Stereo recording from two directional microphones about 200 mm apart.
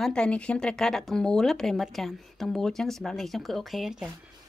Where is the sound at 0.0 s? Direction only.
5° left (ahead or behind).